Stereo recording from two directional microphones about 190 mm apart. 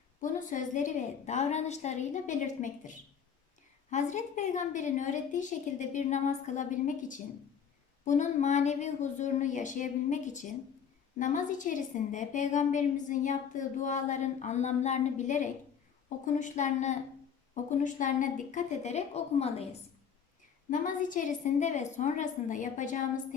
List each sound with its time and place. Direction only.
0.2 s a woman's voice: 40° left (ahead or behind)
20.7 s a woman's voice: 45° left (ahead or behind)